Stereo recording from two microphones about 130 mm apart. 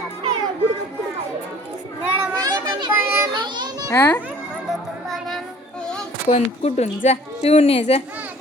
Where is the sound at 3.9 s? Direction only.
15° left (ahead or behind).